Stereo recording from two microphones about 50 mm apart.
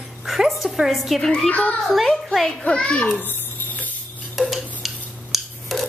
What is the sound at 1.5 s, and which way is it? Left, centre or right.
Speech, left.